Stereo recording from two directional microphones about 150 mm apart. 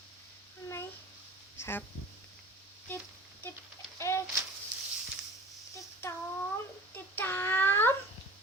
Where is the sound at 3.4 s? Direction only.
15° left (ahead or behind).